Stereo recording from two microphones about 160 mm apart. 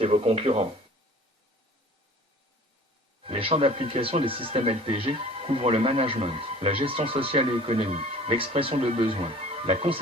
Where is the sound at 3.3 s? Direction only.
35° right (ahead or behind).